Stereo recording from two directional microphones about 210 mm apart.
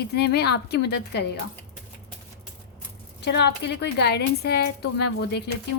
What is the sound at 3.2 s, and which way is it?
A woman's voice, 55° left (ahead or behind).